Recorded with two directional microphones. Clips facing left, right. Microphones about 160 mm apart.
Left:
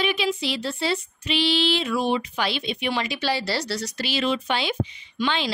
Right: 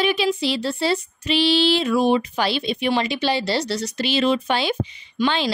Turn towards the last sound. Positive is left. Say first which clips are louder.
# right 4 dB
turn(degrees=-40)  # may be behind; listen again after turning